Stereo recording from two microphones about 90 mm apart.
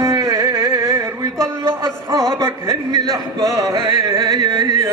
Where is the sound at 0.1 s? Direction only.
45° right (ahead or behind).